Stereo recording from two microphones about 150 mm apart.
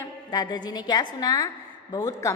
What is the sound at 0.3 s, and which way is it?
A woman's voice, 25° left (ahead or behind).